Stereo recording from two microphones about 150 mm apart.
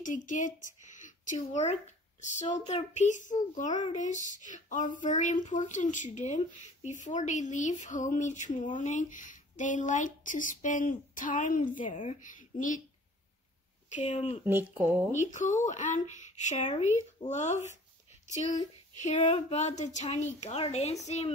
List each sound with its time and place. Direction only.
0.0 s speech: 60° left (ahead or behind)
13.8 s speech: 50° left (ahead or behind)
14.4 s speech: 15° right (ahead or behind)
15.1 s speech: 55° left (ahead or behind)
18.9 s speech: 50° left (ahead or behind)